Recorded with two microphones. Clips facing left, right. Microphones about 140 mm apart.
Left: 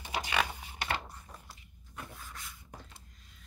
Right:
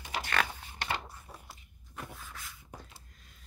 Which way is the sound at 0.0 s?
15° left (ahead or behind).